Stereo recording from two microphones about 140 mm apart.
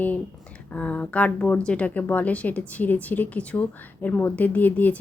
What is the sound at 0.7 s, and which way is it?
A woman's voice, 10° left (ahead or behind).